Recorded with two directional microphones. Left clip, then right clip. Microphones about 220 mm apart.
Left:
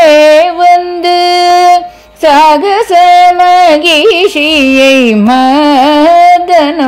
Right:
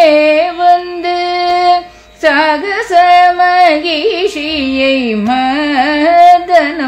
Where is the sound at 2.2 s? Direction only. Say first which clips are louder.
Left 6 dB; 40° left (ahead or behind).